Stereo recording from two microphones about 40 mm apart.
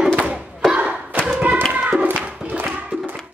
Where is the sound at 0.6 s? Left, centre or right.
Centre.